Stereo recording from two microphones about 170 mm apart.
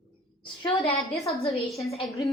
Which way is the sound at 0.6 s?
35° left (ahead or behind).